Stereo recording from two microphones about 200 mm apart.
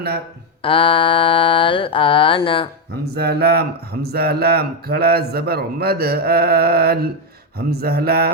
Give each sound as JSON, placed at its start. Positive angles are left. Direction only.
{"t": 0.6, "sound": "mantra", "side_deg": 25}
{"t": 3.2, "sound": "speech", "side_deg": -55}